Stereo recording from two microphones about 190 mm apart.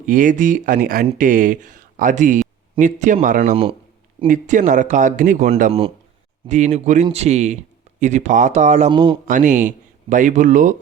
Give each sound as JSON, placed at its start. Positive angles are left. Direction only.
{"t": 0.0, "sound": "speech", "side_deg": -45}
{"t": 3.5, "sound": "a man's voice", "side_deg": -30}
{"t": 4.3, "sound": "a man's voice", "side_deg": -40}
{"t": 8.9, "sound": "speech", "side_deg": -25}
{"t": 9.2, "sound": "a man's voice", "side_deg": -40}